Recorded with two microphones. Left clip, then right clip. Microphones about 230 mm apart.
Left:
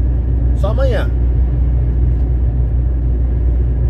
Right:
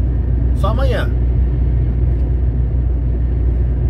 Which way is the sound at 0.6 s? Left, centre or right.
Centre.